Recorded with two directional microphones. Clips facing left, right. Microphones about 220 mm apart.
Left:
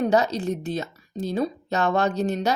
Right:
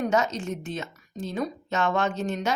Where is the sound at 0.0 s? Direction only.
35° left (ahead or behind).